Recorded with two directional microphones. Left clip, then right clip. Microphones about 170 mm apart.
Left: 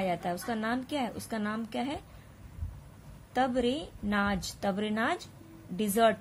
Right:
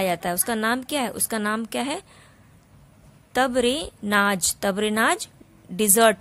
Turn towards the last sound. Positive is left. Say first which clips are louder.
# right 8 dB
turn(degrees=-35)  # may be behind; listen again after turning